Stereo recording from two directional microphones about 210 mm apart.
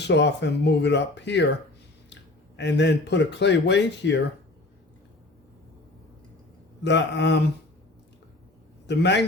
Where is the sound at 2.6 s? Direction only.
55° left (ahead or behind).